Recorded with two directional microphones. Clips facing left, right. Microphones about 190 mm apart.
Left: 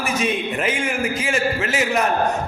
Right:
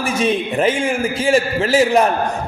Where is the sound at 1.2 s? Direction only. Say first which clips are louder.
Right 6 dB; 30° right (ahead or behind).